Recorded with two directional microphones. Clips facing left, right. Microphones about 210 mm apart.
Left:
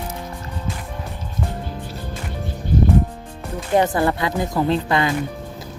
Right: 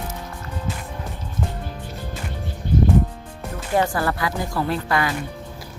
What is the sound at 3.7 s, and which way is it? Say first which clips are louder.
Speech: left 4 dB; 20° left (ahead or behind).